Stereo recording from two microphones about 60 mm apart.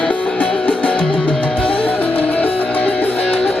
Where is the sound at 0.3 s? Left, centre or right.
Centre.